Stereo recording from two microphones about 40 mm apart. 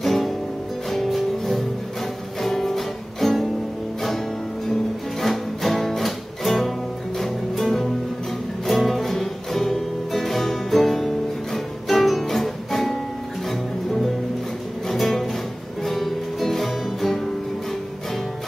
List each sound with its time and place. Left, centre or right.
0.0 s music: centre
5.2 s music: centre
14.9 s music: centre